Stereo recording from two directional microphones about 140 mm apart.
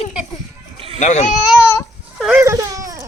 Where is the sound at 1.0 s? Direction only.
60° left (ahead or behind).